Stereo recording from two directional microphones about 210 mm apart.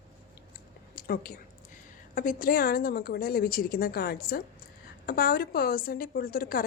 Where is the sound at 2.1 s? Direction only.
40° left (ahead or behind).